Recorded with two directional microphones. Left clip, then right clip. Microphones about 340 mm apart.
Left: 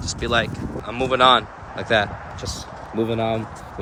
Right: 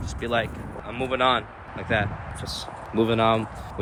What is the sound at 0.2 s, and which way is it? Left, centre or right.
Speech, centre.